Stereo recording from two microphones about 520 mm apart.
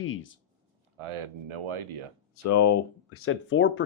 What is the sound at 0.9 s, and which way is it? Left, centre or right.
Speech, right.